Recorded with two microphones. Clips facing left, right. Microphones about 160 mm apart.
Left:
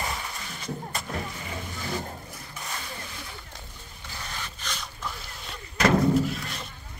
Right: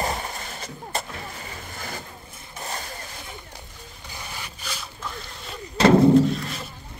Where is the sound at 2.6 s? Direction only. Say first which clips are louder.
Right 5 dB; 40° right (ahead or behind).